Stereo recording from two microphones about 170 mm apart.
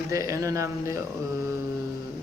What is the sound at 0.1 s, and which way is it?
Speech, 20° right (ahead or behind).